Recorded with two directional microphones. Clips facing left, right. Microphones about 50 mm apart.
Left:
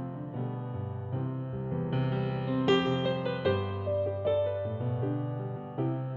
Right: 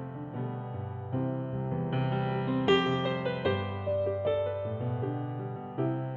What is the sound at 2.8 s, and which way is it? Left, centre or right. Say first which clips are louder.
Music: even; right.